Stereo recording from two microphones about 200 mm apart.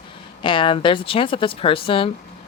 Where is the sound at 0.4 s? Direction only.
25° left (ahead or behind).